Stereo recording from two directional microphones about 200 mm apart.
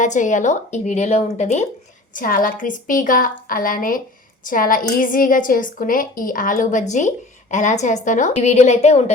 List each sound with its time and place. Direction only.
0.0 s a woman's voice: 40° left (ahead or behind)
2.1 s a woman's voice: 45° left (ahead or behind)